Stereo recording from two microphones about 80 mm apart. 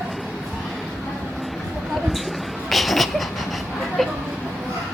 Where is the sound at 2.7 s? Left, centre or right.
Centre.